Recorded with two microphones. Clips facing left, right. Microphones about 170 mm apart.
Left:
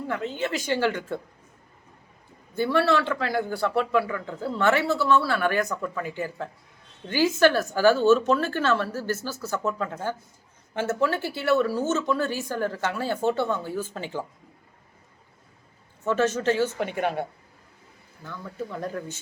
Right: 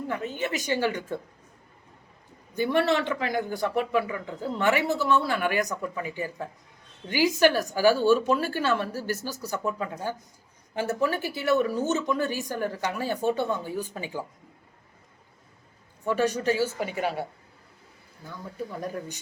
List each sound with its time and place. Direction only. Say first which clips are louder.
0.1 s speech: left 3 dB; 15° right (ahead or behind)
2.6 s speech: left 1 dB; 20° right (ahead or behind)
16.0 s speech: left 2 dB; 15° right (ahead or behind)